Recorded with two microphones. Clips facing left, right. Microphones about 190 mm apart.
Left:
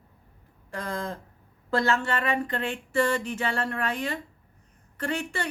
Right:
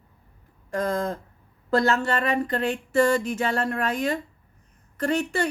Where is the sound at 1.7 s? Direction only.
40° right (ahead or behind).